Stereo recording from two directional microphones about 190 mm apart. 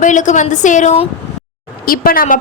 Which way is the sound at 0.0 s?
40° left (ahead or behind).